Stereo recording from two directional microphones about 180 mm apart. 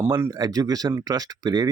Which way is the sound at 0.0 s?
15° right (ahead or behind).